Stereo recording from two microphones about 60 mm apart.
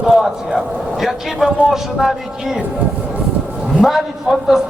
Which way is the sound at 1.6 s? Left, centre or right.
Centre.